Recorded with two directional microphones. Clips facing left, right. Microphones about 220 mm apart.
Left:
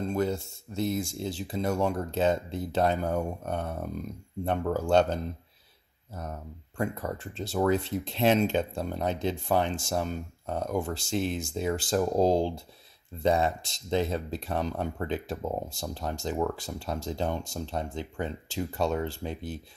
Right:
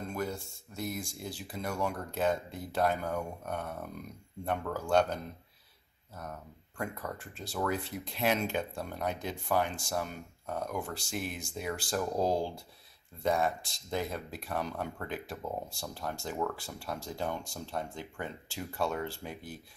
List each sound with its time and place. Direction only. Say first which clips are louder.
0.1 s speech: left 6 dB; 25° left (ahead or behind)
6.8 s speech: left 7 dB; 25° left (ahead or behind)